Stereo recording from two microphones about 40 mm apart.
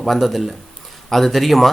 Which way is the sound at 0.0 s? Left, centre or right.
Centre.